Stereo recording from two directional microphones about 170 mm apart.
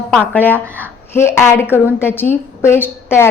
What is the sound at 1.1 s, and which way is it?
A woman's voice, 15° left (ahead or behind).